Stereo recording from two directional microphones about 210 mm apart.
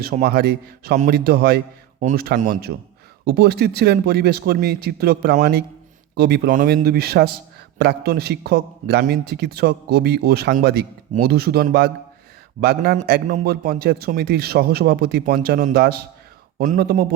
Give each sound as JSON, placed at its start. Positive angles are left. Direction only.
{"t": 0.0, "sound": "a man's voice", "side_deg": -45}